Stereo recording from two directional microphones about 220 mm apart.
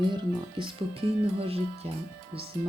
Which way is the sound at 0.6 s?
20° right (ahead or behind).